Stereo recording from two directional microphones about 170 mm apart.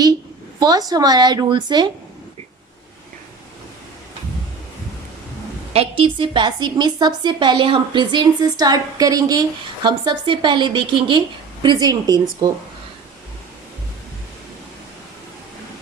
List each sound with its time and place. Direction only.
0.6 s a woman's voice: 20° right (ahead or behind)
5.7 s a woman's voice: 35° right (ahead or behind)